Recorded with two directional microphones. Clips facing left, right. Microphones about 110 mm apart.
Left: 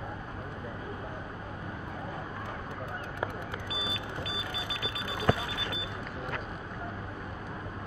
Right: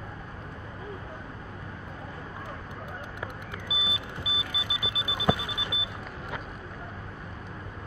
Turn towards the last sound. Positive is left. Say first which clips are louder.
# left 1 dB
turn(degrees=-10)  # may be behind; listen again after turning